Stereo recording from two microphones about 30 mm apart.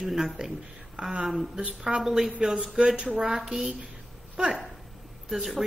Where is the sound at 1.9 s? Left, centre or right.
Right.